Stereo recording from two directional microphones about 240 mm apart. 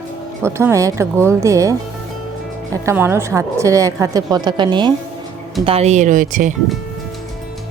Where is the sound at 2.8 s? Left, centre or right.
Centre; by 6.5 s right.